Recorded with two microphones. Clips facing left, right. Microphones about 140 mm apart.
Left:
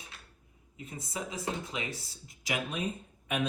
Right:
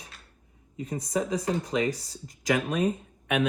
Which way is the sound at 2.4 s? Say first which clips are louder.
Right 9 dB; 90° right.